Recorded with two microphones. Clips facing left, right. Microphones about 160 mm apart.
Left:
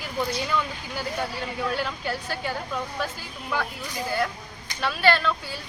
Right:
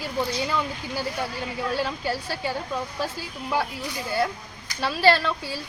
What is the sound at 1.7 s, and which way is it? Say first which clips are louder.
Speech: right 2 dB; 30° right (ahead or behind).